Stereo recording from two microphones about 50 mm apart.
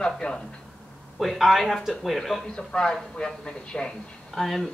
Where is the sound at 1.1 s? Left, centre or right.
Centre.